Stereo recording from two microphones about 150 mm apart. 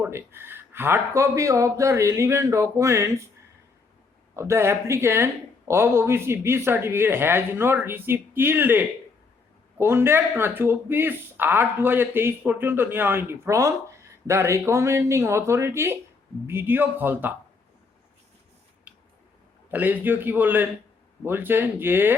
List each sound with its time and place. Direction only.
0.0 s speech: 15° right (ahead or behind)
4.4 s speech: 15° right (ahead or behind)
19.7 s speech: 10° right (ahead or behind)